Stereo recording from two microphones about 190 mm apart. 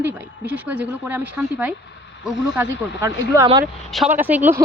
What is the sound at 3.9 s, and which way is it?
Speech, 5° right (ahead or behind).